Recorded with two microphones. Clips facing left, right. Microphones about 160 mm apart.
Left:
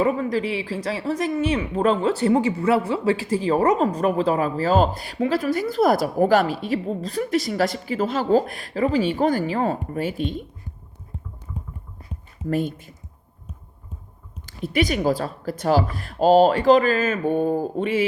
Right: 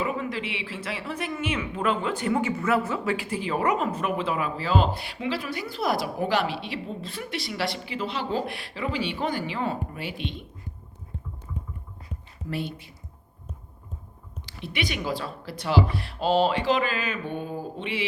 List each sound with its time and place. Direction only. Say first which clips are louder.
0.0 s speech: left 8 dB; 40° left (ahead or behind)
12.5 s speech: left 8 dB; 45° left (ahead or behind)
14.4 s speech: left 9 dB; 45° left (ahead or behind)